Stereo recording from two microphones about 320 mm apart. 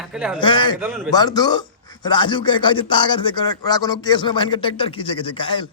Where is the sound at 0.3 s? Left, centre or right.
Centre.